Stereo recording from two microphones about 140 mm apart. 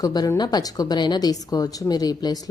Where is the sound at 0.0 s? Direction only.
30° left (ahead or behind).